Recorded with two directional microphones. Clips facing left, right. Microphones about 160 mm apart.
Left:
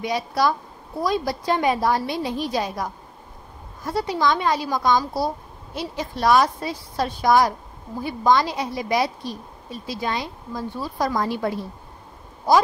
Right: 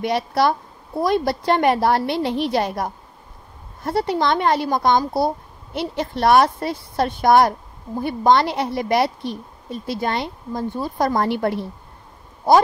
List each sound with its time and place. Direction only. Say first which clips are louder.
0.0 s speech: right 3 dB; 60° right (ahead or behind)